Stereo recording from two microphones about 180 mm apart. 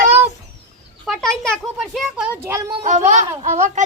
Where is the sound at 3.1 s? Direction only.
40° right (ahead or behind).